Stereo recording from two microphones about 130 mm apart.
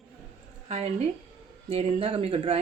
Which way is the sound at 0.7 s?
55° right (ahead or behind).